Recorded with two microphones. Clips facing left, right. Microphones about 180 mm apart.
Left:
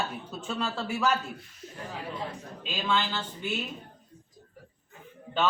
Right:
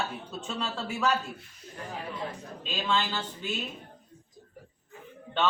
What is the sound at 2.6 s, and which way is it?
Speech, 5° left (ahead or behind).